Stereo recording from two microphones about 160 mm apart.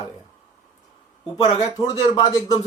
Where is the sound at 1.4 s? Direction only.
40° left (ahead or behind).